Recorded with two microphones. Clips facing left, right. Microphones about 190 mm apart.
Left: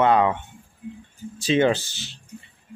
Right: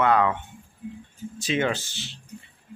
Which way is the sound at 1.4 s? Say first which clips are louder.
Left 6 dB; 30° left (ahead or behind).